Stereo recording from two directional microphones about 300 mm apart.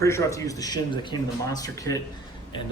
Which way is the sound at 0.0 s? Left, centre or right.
Centre.